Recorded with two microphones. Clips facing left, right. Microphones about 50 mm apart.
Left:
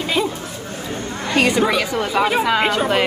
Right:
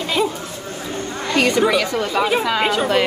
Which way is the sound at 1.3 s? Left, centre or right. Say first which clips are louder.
Even; centre.